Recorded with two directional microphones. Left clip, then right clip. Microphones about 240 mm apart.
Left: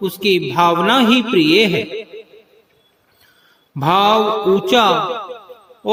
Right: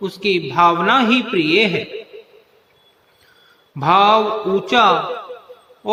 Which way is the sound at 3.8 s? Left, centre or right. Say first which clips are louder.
Right 1 dB; left.